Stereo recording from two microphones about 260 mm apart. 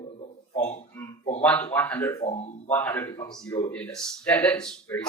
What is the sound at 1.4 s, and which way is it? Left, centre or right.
Speech, centre.